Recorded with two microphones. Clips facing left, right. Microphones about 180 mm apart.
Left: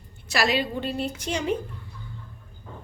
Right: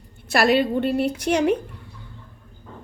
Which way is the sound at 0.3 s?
55° right (ahead or behind).